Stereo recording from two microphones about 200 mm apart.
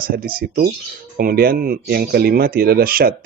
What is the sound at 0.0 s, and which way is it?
Speech, 45° right (ahead or behind).